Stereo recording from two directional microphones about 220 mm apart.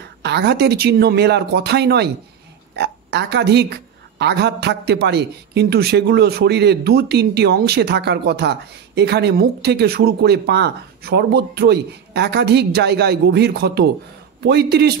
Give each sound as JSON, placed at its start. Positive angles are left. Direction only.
{"t": 0.2, "sound": "a woman's voice", "side_deg": -50}